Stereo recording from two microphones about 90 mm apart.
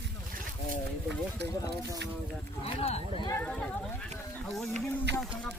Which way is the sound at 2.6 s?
90° left.